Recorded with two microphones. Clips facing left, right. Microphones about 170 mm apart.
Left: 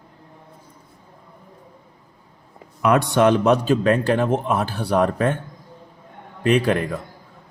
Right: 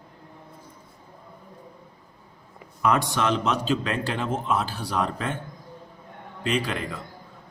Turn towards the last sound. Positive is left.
turn(degrees=55)  # may be behind; listen again after turning